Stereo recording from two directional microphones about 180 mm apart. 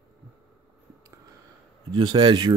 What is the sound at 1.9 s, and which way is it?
Mantra, 25° right (ahead or behind).